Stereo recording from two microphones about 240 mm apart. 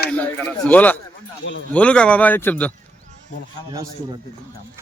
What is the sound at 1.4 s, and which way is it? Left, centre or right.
Speech, left.